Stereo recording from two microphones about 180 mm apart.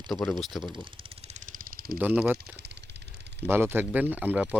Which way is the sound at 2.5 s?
70° right (ahead or behind).